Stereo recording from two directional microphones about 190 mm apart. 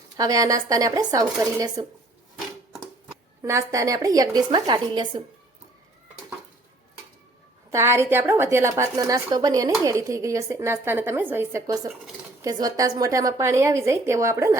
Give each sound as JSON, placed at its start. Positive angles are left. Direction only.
{"t": 0.2, "sound": "a woman's voice", "side_deg": -20}
{"t": 3.4, "sound": "a woman's voice", "side_deg": -15}
{"t": 7.7, "sound": "a woman's voice", "side_deg": -15}